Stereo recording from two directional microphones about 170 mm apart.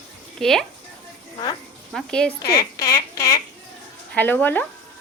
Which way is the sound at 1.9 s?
5° left (ahead or behind).